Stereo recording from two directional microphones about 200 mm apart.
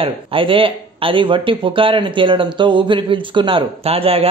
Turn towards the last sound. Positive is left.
turn(degrees=-30)  # may be behind; listen again after turning